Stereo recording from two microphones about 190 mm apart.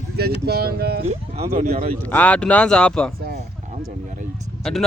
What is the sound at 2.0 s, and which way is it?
Speech, 10° left (ahead or behind).